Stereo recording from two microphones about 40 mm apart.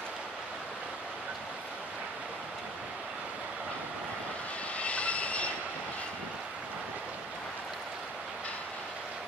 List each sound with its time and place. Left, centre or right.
4.7 s train: left